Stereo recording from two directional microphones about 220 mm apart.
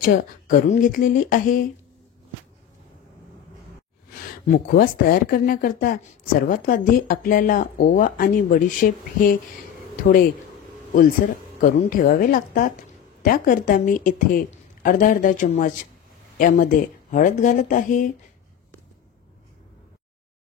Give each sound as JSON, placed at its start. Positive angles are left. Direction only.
{"t": 0.0, "sound": "speech", "side_deg": 40}
{"t": 4.3, "sound": "speech", "side_deg": 40}
{"t": 11.6, "sound": "speech", "side_deg": 40}